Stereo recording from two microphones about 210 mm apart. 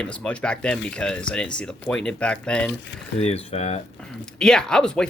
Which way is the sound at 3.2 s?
30° left (ahead or behind).